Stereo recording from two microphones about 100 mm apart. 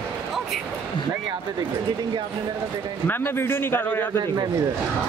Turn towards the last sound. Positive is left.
turn(degrees=20)  # may be behind; listen again after turning